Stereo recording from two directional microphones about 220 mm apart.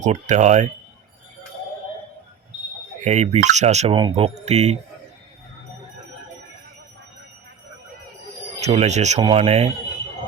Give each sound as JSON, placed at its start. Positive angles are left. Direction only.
{"t": 0.0, "sound": "speech", "side_deg": -30}
{"t": 3.0, "sound": "speech", "side_deg": -30}
{"t": 8.6, "sound": "speech", "side_deg": -30}